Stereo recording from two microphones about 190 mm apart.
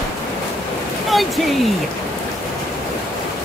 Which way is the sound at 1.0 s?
Centre (ahead or behind).